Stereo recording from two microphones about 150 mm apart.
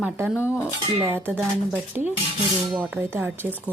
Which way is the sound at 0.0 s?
10° right (ahead or behind).